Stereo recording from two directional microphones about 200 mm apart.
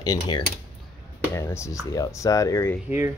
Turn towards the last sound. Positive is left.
turn(degrees=-10)  # may be behind; listen again after turning